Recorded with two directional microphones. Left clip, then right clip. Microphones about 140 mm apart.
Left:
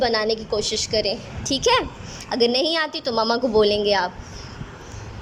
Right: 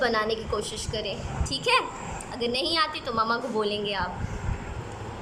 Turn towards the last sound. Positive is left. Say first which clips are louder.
# left 9 dB
turn(degrees=55)  # may be behind; listen again after turning